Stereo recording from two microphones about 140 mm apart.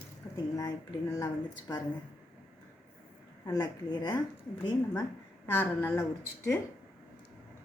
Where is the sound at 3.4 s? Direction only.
25° left (ahead or behind).